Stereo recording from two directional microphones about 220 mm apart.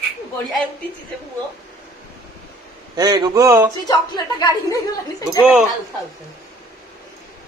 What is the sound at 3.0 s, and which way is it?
Speech, 20° right (ahead or behind).